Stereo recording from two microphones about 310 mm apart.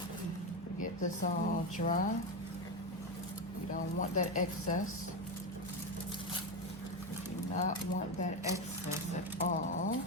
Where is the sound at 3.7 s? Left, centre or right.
Left.